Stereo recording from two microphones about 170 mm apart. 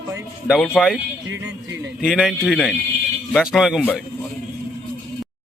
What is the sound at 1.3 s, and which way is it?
Music, 90° right.